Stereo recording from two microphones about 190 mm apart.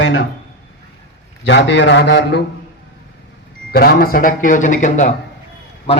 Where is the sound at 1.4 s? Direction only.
70° left (ahead or behind).